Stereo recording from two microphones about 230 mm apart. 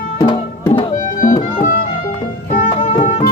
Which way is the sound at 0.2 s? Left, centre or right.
Left.